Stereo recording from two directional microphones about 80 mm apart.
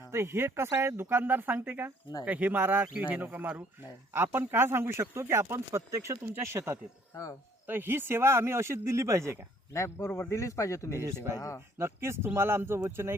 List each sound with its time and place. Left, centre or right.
0.1 s speech: right
7.1 s speech: left
7.7 s speech: right
9.7 s speech: left
11.0 s speech: right
11.3 s speech: left
11.8 s speech: right